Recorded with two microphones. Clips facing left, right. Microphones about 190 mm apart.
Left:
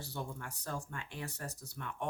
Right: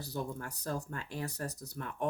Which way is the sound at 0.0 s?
40° right (ahead or behind).